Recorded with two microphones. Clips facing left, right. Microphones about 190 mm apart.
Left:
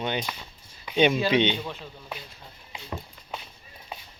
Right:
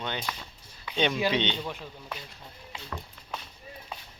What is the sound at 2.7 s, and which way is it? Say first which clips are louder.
Music: left 3 dB; 20° left (ahead or behind).